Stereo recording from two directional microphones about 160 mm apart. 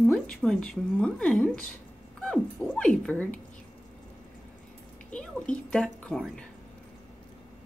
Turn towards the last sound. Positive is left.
turn(degrees=5)  # may be behind; listen again after turning